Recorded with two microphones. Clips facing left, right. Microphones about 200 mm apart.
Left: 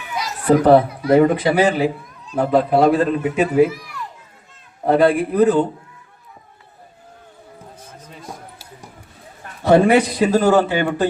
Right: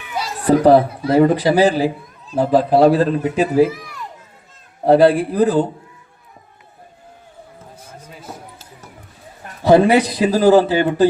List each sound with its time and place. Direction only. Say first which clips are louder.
0.2 s a man's voice: right 1 dB; 30° right (ahead or behind)
4.9 s a man's voice: right 3 dB; 35° right (ahead or behind)
7.8 s basketball bounce: right 1 dB; 10° right (ahead or behind)
9.6 s a man's voice: right 1 dB; 35° right (ahead or behind)